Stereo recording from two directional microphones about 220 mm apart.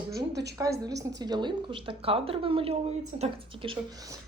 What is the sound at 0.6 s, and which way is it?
Speech, 15° right (ahead or behind).